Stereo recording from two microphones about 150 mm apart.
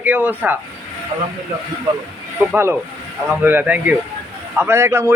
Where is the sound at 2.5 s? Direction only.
15° right (ahead or behind).